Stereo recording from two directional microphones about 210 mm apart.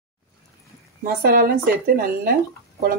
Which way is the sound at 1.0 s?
45° right (ahead or behind).